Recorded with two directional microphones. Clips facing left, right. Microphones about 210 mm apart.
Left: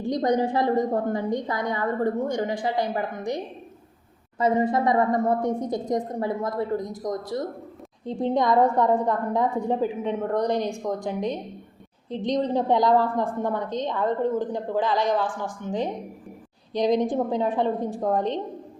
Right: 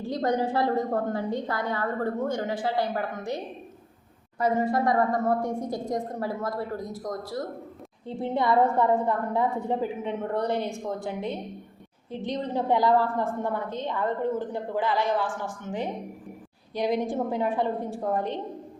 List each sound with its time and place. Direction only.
0.0 s a woman's voice: 15° left (ahead or behind)
4.4 s a woman's voice: 20° left (ahead or behind)